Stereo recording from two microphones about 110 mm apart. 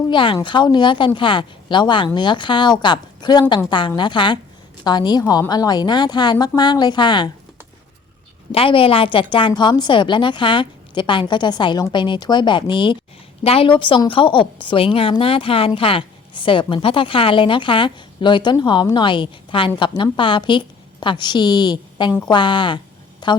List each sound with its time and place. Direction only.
0.1 s a woman's voice: 50° left (ahead or behind)
8.5 s speech: 55° left (ahead or behind)
9.5 s speech: 40° left (ahead or behind)
13.4 s a woman's voice: 60° left (ahead or behind); by 23.4 s 45° left (ahead or behind)